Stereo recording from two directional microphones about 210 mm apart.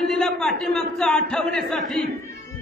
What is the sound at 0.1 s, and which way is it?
A man's voice, centre (ahead or behind).